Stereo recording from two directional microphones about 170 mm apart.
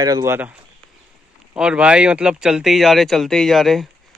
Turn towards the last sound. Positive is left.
turn(degrees=0)  # may be behind; listen again after turning